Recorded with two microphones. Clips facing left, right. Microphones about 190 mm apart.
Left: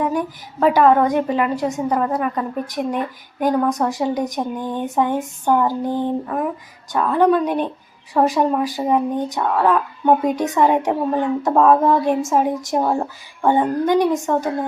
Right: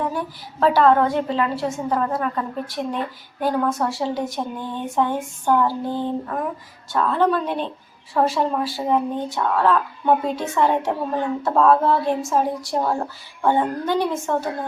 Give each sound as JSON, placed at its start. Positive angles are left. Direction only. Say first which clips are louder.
{"t": 0.0, "sound": "speech", "louder": "left 4 dB", "side_deg": 15}